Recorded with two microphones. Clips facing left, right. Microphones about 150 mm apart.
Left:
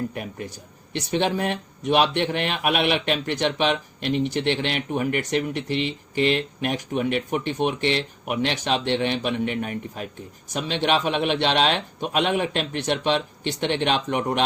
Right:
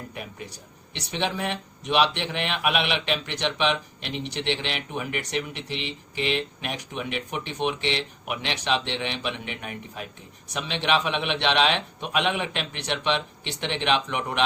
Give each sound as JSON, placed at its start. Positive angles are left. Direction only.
{"t": 0.1, "sound": "speech", "side_deg": 45}